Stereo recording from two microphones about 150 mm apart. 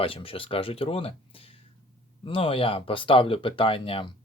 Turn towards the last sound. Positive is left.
turn(degrees=35)  # may be behind; listen again after turning